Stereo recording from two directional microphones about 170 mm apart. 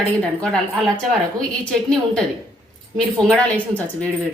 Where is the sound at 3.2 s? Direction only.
5° left (ahead or behind).